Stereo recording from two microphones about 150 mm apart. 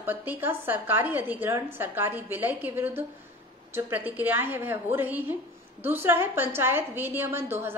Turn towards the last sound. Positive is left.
turn(degrees=-15)  # may be behind; listen again after turning